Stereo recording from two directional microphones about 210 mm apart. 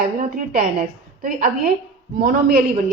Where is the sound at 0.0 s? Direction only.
45° right (ahead or behind).